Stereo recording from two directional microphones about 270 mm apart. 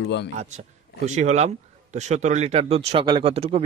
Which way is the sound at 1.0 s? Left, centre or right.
Right.